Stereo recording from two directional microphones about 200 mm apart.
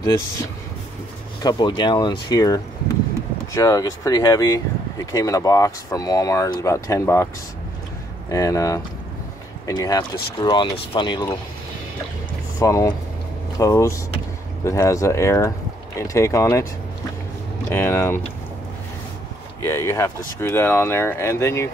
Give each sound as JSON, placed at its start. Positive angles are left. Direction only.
{"t": 1.4, "sound": "speech", "side_deg": 20}
{"t": 8.3, "sound": "speech", "side_deg": 15}
{"t": 12.5, "sound": "speech", "side_deg": 15}
{"t": 17.6, "sound": "speech", "side_deg": 10}
{"t": 19.6, "sound": "speech", "side_deg": 15}